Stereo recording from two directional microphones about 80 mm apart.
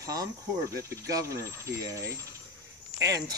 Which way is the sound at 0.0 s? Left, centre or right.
Right.